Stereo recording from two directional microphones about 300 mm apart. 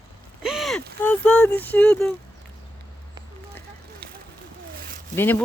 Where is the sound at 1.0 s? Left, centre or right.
Centre.